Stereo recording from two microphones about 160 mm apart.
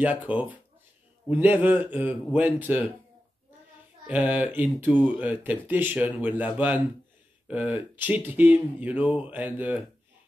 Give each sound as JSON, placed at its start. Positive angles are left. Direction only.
{"t": 0.0, "sound": "speech", "side_deg": -10}
{"t": 4.1, "sound": "speech", "side_deg": -10}